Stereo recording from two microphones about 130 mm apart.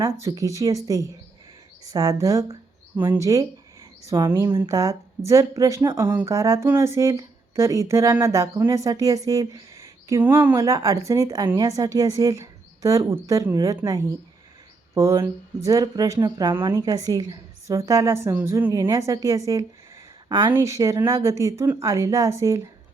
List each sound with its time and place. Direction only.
0.0 s speech: 25° right (ahead or behind)
4.5 s speech: 30° right (ahead or behind)
20.5 s speech: 20° right (ahead or behind)